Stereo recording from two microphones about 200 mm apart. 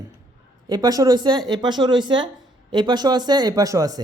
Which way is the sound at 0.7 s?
20° right (ahead or behind).